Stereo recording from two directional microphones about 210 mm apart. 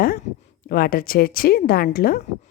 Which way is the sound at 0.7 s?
45° left (ahead or behind).